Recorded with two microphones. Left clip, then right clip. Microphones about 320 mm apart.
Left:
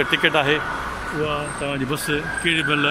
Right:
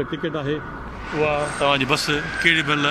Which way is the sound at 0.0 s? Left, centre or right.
Left.